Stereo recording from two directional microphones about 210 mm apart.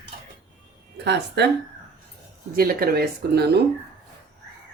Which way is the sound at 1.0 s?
55° right (ahead or behind).